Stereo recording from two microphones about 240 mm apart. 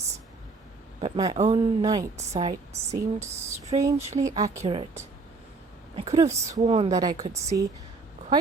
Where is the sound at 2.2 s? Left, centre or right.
Right.